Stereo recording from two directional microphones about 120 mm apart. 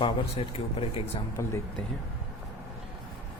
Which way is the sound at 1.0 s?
25° left (ahead or behind).